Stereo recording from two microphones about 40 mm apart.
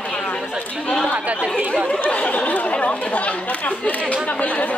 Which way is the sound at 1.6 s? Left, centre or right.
Right.